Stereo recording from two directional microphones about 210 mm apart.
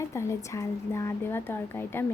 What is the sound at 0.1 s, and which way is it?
Speech, 15° left (ahead or behind).